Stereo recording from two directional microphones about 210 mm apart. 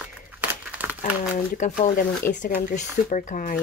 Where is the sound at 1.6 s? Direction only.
35° left (ahead or behind).